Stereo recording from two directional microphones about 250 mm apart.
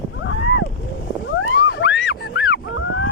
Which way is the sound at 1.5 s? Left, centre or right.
Left.